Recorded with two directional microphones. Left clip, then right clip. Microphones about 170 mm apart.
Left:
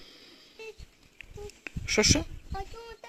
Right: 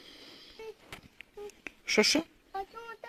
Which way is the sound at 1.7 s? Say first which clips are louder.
Left 1 dB; centre (ahead or behind).